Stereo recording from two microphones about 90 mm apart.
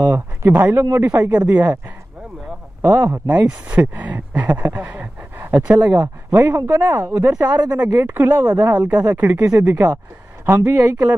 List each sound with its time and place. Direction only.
0.0 s speech: 20° right (ahead or behind)
2.8 s speech: 40° right (ahead or behind)
3.1 s speech: 15° right (ahead or behind)
6.3 s speech: 25° right (ahead or behind)
6.6 s speech: 40° right (ahead or behind)
6.9 s speech: 30° right (ahead or behind)
7.4 s speech: 50° right (ahead or behind)
8.0 s speech: 25° right (ahead or behind)
8.5 s speech: 35° right (ahead or behind)
9.1 s speech: 20° right (ahead or behind)
10.4 s speech: 25° right (ahead or behind)